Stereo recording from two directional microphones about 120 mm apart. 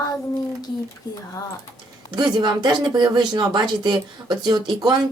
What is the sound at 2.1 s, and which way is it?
Speech, 40° right (ahead or behind).